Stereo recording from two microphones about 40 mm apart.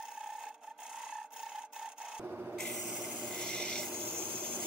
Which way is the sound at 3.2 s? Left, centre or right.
Centre.